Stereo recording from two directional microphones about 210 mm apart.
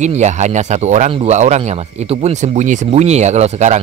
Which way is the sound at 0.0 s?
35° right (ahead or behind).